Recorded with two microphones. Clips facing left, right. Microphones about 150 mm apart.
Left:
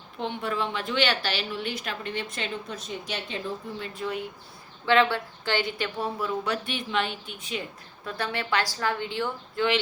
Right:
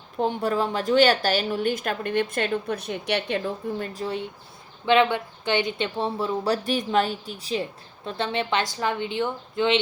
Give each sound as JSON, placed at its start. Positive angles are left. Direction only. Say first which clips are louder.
{"t": 0.2, "sound": "a woman's voice", "louder": "right 6 dB", "side_deg": -40}
{"t": 3.9, "sound": "speech", "louder": "right 2 dB", "side_deg": -30}
{"t": 4.9, "sound": "speech", "louder": "right 2 dB", "side_deg": -20}
{"t": 8.0, "sound": "speech", "louder": "right 4 dB", "side_deg": -25}